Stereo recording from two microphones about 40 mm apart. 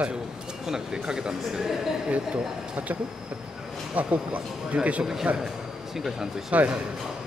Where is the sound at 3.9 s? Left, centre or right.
Right.